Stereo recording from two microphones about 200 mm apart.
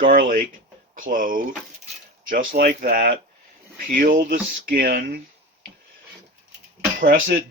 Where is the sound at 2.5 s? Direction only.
45° right (ahead or behind).